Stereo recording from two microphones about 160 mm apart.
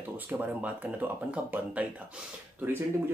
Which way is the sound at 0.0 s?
10° right (ahead or behind).